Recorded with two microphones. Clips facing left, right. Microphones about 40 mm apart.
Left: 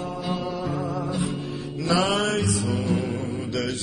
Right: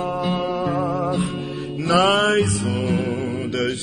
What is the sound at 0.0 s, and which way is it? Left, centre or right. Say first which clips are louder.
Music: right 6 dB; right.